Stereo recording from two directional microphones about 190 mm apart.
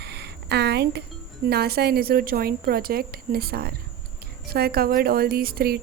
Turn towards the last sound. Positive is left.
turn(degrees=-50)  # may be behind; listen again after turning